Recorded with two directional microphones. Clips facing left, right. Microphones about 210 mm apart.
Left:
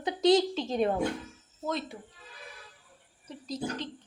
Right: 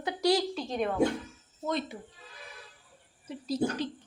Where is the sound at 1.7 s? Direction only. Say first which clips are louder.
Right 1 dB; centre (ahead or behind).